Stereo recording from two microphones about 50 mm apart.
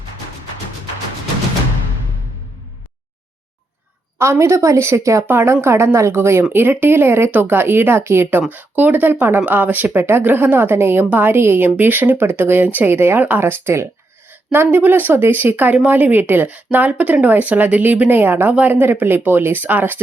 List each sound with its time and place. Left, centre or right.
4.2 s a woman's voice: right
5.2 s speech: right
5.5 s a woman's voice: right
6.5 s speech: right
7.3 s speech: right
8.5 s speech: right
11.1 s speech: right
11.3 s speech: right
12.9 s a woman's voice: right
14.5 s speech: right
15.7 s speech: right